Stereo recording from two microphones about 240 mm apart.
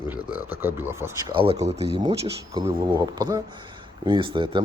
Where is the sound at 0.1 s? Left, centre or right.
Centre.